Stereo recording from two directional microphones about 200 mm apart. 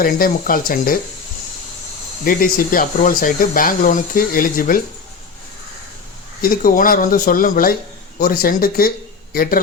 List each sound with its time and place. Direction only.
0.0 s speech: 45° left (ahead or behind)
2.2 s speech: 45° left (ahead or behind)
6.4 s speech: 45° left (ahead or behind)